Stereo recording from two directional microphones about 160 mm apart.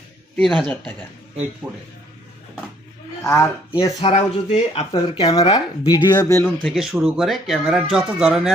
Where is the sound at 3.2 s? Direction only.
20° left (ahead or behind).